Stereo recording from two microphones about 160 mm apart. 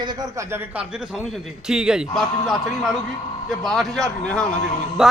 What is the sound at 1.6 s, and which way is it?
A man's voice, 5° right (ahead or behind).